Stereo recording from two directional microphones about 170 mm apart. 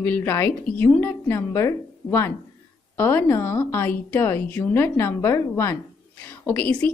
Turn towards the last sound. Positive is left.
turn(degrees=10)  # may be behind; listen again after turning